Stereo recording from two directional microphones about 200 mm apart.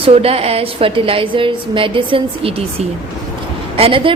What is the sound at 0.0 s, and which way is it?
A woman's voice, 30° right (ahead or behind).